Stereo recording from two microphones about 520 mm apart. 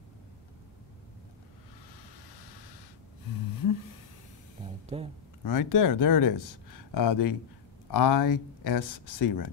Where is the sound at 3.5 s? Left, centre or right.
Left.